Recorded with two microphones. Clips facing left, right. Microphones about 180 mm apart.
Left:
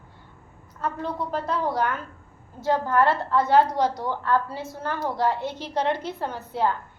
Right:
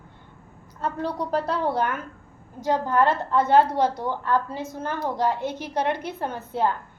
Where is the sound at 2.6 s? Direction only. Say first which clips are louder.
Even; 15° right (ahead or behind).